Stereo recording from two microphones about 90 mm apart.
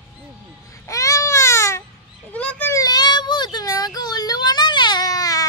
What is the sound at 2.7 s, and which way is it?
Child singing, 45° left (ahead or behind).